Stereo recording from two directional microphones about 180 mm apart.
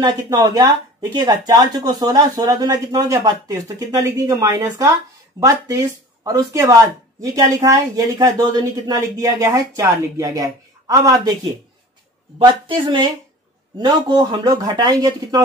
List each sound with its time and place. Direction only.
0.0 s a woman's voice: 20° right (ahead or behind)
12.4 s speech: 25° right (ahead or behind)